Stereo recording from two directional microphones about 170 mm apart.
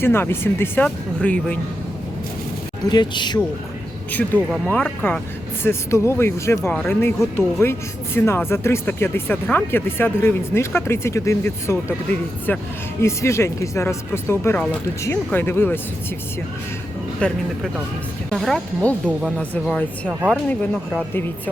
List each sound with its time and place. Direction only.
0.0 s speech: 15° left (ahead or behind)
2.9 s speech: 25° left (ahead or behind)
4.1 s speech: 10° left (ahead or behind)
17.2 s speech: 5° left (ahead or behind)